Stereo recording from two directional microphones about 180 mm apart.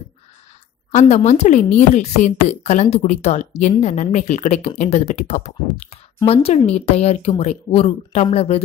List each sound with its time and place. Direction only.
0.9 s speech: 40° left (ahead or behind)